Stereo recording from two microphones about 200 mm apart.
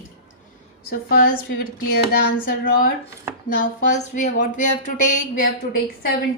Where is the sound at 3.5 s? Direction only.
35° left (ahead or behind).